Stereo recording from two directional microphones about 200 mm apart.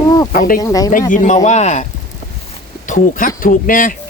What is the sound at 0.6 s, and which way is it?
Speech, 15° left (ahead or behind).